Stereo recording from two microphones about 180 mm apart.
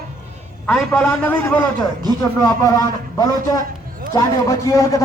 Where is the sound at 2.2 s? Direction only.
20° left (ahead or behind).